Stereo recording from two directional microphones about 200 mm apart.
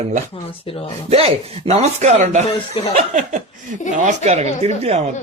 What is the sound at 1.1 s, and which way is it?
Speech, 30° right (ahead or behind).